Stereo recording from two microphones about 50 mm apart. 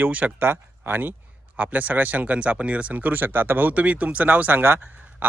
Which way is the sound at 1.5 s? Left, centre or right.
Right.